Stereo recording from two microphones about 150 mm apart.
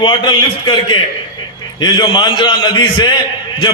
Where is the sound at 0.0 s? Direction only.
30° left (ahead or behind).